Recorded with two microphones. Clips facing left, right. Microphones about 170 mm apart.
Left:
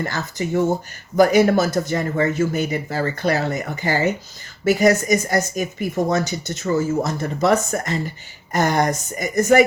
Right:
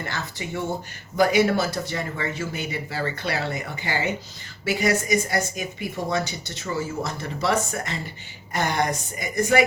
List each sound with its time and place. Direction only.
0.0 s speech: 40° left (ahead or behind)